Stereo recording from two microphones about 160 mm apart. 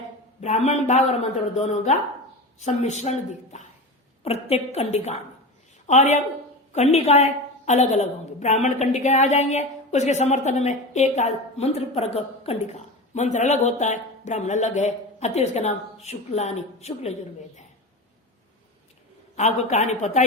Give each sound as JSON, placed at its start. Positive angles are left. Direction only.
{"t": 0.4, "sound": "a woman's voice", "side_deg": 45}
{"t": 19.4, "sound": "a woman's voice", "side_deg": 45}